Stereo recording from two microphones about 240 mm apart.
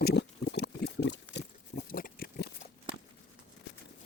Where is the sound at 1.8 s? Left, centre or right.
Left.